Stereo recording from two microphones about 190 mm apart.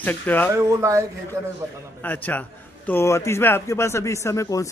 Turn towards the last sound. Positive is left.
turn(degrees=15)  # may be behind; listen again after turning